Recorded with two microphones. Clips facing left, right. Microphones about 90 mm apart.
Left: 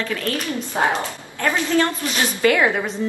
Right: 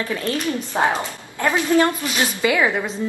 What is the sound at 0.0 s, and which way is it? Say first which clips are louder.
A woman's voice: right 1 dB; 25° right (ahead or behind).